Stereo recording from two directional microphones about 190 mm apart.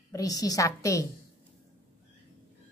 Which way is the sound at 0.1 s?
20° left (ahead or behind).